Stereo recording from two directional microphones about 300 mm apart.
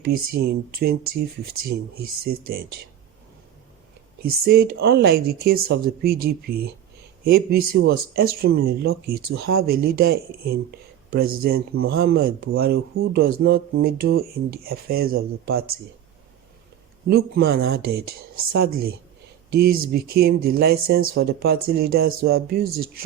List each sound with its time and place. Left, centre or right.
0.3 s speech: right
4.2 s speech: right
17.1 s speech: right